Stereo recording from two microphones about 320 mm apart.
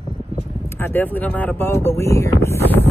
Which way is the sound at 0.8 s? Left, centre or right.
Centre.